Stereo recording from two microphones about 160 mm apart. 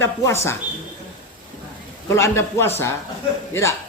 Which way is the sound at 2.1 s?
15° left (ahead or behind).